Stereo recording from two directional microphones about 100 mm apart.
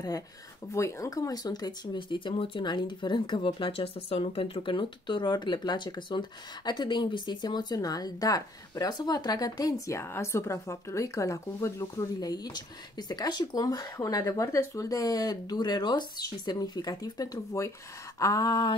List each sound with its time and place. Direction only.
0.7 s speech: 30° left (ahead or behind)
2.0 s speech: 55° left (ahead or behind); by 18.7 s 35° left (ahead or behind)